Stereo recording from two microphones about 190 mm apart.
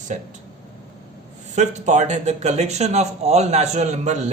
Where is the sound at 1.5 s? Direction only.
40° right (ahead or behind).